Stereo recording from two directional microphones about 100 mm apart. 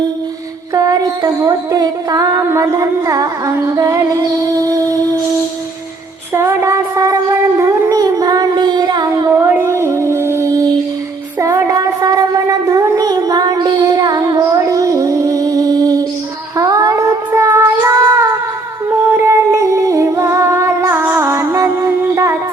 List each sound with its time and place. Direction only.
0.7 s music: 35° right (ahead or behind)
6.3 s a sound: 25° right (ahead or behind); by 9.3 s 45° right (ahead or behind)
9.3 s music: 25° right (ahead or behind)
16.6 s child singing: 35° right (ahead or behind)
19.1 s music: 25° right (ahead or behind)